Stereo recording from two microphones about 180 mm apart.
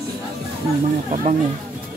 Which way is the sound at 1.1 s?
45° right (ahead or behind).